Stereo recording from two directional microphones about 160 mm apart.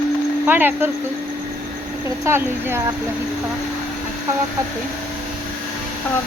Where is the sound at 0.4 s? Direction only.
10° right (ahead or behind).